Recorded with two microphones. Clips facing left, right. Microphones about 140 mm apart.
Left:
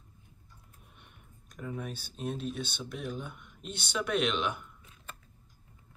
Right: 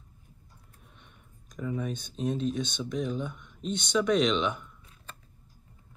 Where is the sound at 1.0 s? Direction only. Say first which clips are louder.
Right 1 dB; 5° left (ahead or behind).